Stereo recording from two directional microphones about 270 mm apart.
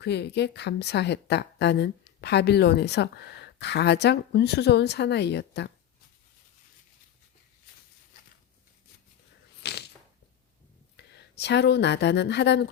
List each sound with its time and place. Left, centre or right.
0.0 s a woman's voice: left
9.6 s a sound: left
10.9 s speech: left